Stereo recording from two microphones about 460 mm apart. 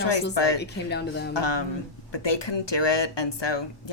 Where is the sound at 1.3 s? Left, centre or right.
Left.